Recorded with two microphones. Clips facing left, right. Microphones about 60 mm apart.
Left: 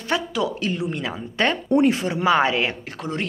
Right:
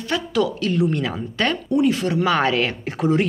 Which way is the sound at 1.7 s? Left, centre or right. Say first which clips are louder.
Left 1 dB; left.